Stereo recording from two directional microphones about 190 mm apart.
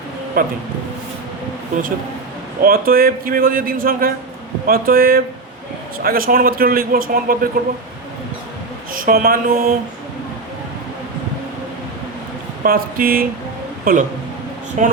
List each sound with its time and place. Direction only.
0.4 s a man's voice: 50° right (ahead or behind)
2.6 s a man's voice: 50° right (ahead or behind)
8.9 s a sound: 50° right (ahead or behind)
12.6 s a man's voice: 50° right (ahead or behind)